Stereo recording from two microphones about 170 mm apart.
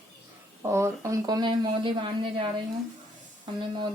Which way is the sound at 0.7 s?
15° right (ahead or behind).